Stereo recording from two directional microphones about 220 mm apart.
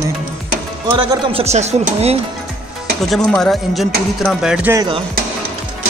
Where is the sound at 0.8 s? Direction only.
20° right (ahead or behind).